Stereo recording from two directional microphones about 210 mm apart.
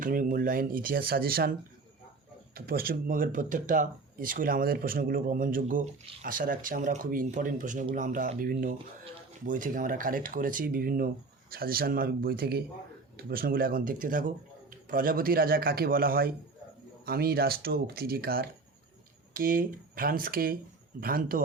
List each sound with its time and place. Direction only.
0.0 s speech: 40° right (ahead or behind)
2.6 s speech: 45° right (ahead or behind)